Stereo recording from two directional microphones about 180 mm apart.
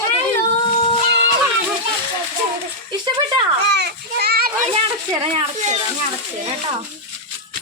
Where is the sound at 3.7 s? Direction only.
65° right (ahead or behind).